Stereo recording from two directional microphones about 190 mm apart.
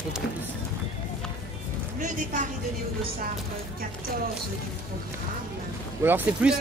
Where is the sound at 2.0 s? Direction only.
45° right (ahead or behind).